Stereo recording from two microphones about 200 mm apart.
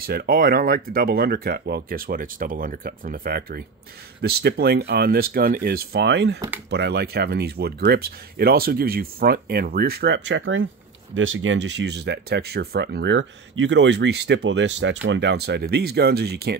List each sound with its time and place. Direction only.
0.0 s speech: 50° right (ahead or behind)